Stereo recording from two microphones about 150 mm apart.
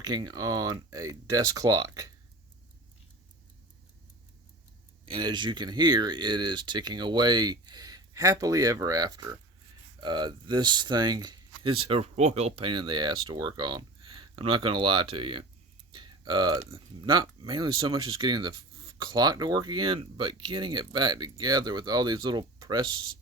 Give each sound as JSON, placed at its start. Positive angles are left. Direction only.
{"t": 0.0, "sound": "speech", "side_deg": -25}
{"t": 5.0, "sound": "speech", "side_deg": -30}